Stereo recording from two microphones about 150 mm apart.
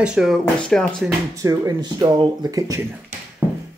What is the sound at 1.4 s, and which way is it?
Speech, 25° right (ahead or behind).